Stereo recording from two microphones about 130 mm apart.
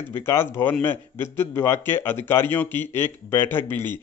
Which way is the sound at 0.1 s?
20° left (ahead or behind).